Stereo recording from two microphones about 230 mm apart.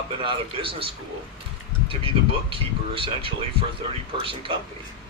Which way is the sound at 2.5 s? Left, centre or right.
Right.